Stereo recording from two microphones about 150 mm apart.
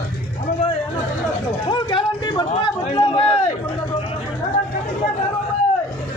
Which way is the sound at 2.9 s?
35° left (ahead or behind).